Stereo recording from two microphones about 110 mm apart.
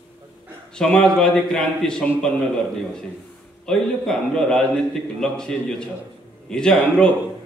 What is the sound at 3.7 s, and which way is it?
A man's voice, 5° left (ahead or behind).